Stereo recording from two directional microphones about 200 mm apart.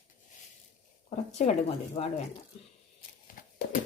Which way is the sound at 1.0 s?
30° left (ahead or behind).